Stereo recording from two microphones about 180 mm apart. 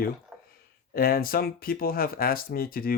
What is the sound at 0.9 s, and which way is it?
Speech, 55° left (ahead or behind).